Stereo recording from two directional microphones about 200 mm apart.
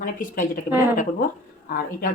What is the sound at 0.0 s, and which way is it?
Speech, 40° left (ahead or behind).